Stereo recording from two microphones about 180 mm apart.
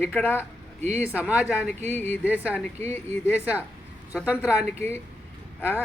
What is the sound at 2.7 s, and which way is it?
Speech, 35° right (ahead or behind).